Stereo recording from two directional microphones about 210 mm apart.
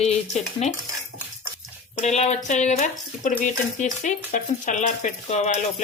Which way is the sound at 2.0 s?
30° left (ahead or behind).